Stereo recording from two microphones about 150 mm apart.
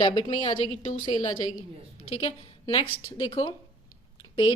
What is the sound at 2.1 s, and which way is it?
A woman's voice, 40° left (ahead or behind).